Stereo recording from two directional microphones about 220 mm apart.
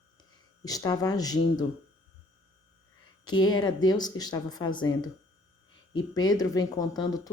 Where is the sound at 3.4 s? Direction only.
20° left (ahead or behind).